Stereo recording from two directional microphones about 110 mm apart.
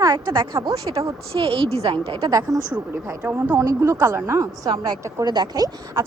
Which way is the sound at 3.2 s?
20° right (ahead or behind).